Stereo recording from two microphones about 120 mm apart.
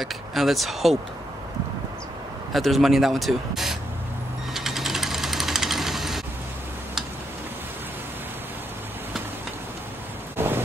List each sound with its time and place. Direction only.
0.0 s speech: centre (ahead or behind)
2.5 s speech: centre (ahead or behind)
4.6 s sewing machine: centre (ahead or behind)
10.3 s thunder: 20° right (ahead or behind)